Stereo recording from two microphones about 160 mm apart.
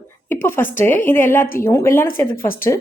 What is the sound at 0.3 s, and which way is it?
Speech, 15° left (ahead or behind).